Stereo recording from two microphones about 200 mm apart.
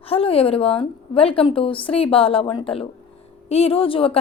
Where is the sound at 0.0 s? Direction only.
30° left (ahead or behind).